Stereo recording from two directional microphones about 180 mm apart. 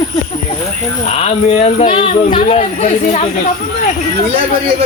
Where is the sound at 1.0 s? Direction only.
35° left (ahead or behind).